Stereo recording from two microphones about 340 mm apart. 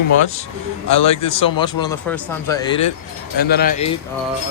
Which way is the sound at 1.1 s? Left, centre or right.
Centre.